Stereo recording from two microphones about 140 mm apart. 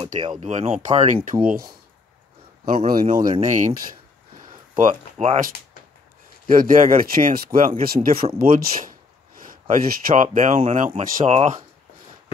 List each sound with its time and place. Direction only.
0.4 s speech: 55° right (ahead or behind)
1.0 s speech: 70° right (ahead or behind)
2.9 s speech: 90° right
3.3 s speech: 65° right (ahead or behind)
4.7 s speech: 60° right (ahead or behind)